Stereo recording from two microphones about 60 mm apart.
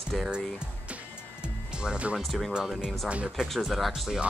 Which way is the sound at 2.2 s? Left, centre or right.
Centre.